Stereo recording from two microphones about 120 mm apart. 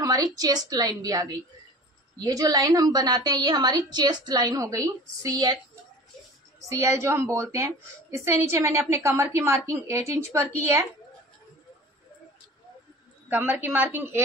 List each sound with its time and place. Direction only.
0.0 s a woman's voice: 30° right (ahead or behind)
6.7 s a woman's voice: 25° right (ahead or behind)
13.3 s a woman's voice: 15° right (ahead or behind)